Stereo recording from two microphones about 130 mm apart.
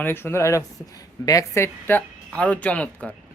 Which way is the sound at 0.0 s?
15° left (ahead or behind).